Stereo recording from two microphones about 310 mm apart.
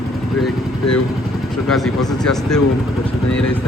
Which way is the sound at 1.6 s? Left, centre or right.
Centre.